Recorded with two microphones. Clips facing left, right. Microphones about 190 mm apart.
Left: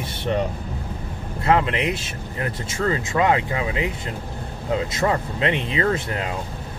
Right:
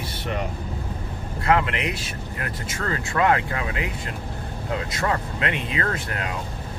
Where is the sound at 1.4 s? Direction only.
20° left (ahead or behind).